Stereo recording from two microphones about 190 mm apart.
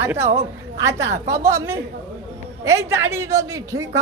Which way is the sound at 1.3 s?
15° right (ahead or behind).